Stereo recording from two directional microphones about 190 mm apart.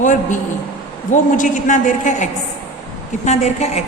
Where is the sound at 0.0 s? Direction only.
40° left (ahead or behind).